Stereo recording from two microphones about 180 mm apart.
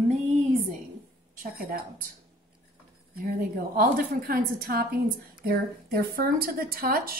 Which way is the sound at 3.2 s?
55° right (ahead or behind).